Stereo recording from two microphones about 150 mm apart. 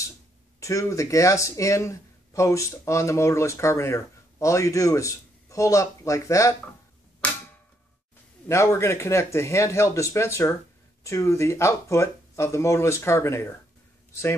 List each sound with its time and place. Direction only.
0.6 s speech: 20° left (ahead or behind)
7.2 s a sound: 10° left (ahead or behind)
8.5 s speech: 20° left (ahead or behind)